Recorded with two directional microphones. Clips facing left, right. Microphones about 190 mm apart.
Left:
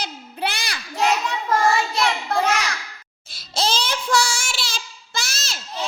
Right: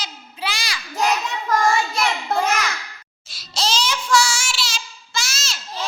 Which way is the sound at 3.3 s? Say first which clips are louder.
Left 1 dB; 55° left (ahead or behind).